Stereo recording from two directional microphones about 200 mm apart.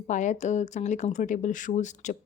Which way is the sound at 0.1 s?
35° left (ahead or behind).